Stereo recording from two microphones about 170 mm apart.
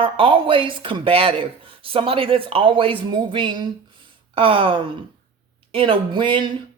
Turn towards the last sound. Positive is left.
turn(degrees=-30)  # may be behind; listen again after turning